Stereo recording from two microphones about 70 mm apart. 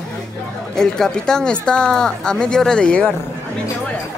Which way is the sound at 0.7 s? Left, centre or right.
Centre.